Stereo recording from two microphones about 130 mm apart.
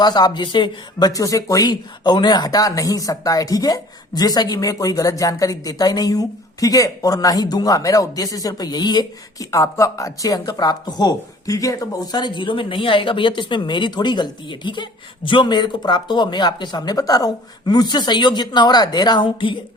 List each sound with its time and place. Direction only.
0.0 s speech: 35° left (ahead or behind)